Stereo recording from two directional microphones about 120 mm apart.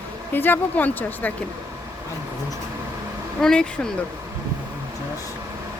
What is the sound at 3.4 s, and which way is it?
Speech, 5° left (ahead or behind).